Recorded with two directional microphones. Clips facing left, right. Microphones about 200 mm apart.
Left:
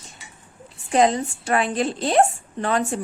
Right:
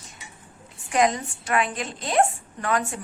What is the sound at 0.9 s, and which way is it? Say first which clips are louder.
A woman's voice: left 4 dB; 30° left (ahead or behind).